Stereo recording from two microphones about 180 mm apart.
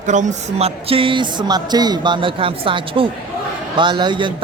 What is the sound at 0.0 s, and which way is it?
Speech, 45° right (ahead or behind).